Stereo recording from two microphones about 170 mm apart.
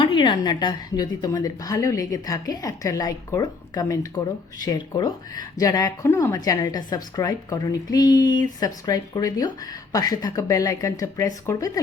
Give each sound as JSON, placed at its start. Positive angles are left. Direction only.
{"t": 0.0, "sound": "speech", "side_deg": 30}